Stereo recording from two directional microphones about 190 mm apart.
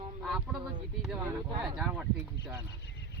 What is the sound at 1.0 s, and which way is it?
Speech, 5° right (ahead or behind).